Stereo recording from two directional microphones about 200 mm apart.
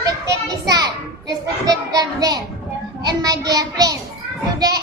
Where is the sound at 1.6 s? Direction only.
20° right (ahead or behind).